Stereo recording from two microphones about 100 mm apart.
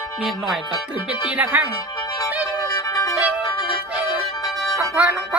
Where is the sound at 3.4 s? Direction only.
55° left (ahead or behind).